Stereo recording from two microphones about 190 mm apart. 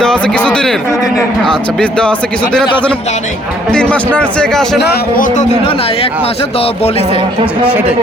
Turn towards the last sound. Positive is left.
turn(degrees=-5)  # may be behind; listen again after turning